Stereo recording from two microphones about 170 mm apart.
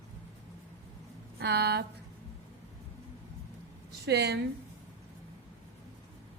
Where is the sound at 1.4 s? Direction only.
70° right (ahead or behind).